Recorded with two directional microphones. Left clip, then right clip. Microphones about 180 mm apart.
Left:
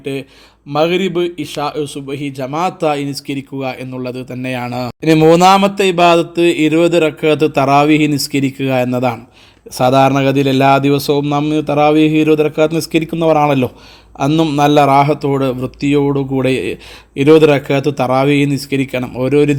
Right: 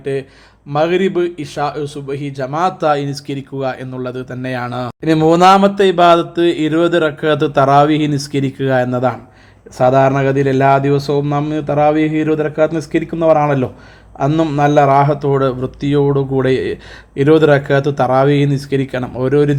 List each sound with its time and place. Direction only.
0.0 s a man's voice: 35° left (ahead or behind)